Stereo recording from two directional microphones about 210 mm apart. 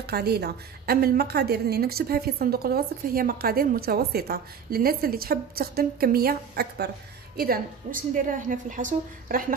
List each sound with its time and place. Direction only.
0.0 s a woman's voice: 50° right (ahead or behind)